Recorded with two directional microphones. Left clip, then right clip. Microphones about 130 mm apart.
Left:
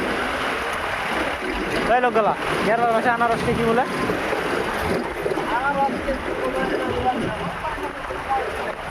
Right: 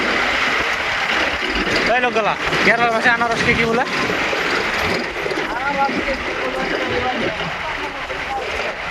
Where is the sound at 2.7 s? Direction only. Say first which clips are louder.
Right 3 dB; 20° left (ahead or behind).